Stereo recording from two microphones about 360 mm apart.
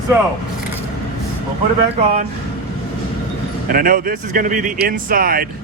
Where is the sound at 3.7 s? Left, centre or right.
Right.